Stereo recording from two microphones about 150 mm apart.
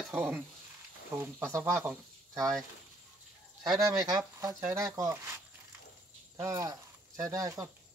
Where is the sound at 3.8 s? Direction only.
25° right (ahead or behind).